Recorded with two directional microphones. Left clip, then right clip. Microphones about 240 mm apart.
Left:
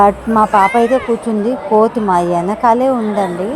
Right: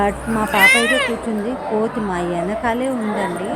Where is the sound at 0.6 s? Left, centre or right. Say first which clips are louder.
Left 1 dB; centre.